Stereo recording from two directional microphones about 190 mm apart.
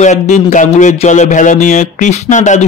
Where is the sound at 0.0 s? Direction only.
40° left (ahead or behind).